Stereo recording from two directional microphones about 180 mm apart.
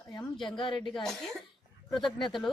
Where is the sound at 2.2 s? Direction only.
25° left (ahead or behind).